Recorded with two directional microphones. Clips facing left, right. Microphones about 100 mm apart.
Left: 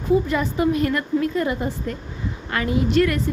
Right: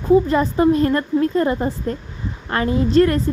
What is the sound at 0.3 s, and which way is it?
A woman's voice, 35° right (ahead or behind).